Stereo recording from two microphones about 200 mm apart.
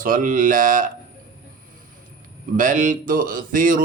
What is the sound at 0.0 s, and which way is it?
Speech, 45° right (ahead or behind).